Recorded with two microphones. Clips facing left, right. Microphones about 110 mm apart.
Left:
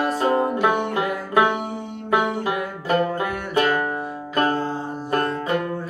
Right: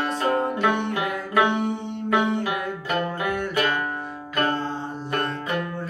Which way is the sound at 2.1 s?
5° left (ahead or behind).